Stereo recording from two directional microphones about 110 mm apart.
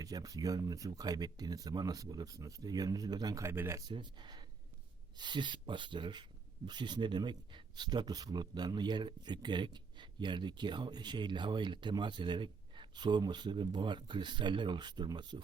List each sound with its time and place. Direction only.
0.0 s speech: 35° right (ahead or behind)
3.4 s speech: 20° right (ahead or behind)
3.8 s speech: 45° right (ahead or behind)